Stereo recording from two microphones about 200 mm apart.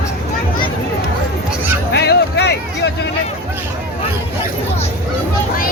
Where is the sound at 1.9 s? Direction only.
55° left (ahead or behind).